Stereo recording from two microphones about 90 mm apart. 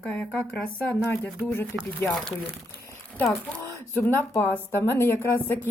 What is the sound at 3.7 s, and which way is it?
Speech, 30° left (ahead or behind).